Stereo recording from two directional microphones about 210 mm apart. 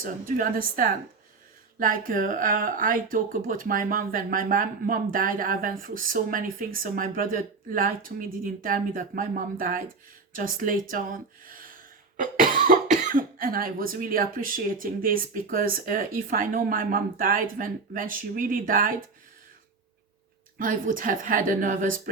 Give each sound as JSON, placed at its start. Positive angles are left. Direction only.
{"t": 0.0, "sound": "speech", "side_deg": -40}
{"t": 20.6, "sound": "speech", "side_deg": -40}